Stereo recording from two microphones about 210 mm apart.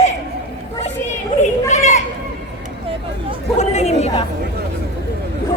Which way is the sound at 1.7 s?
35° left (ahead or behind).